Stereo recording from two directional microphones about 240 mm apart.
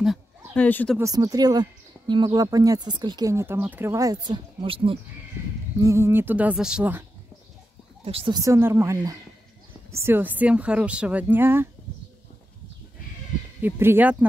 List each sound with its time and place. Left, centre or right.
0.0 s a sound: centre
0.9 s speech: centre
5.4 s a sound: centre
5.8 s speech: centre
8.0 s speech: right
13.6 s speech: centre